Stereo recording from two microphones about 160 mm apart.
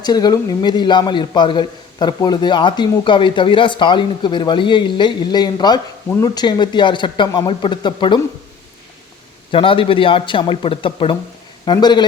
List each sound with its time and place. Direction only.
0.0 s a man's voice: 25° left (ahead or behind)
9.5 s a man's voice: 35° left (ahead or behind)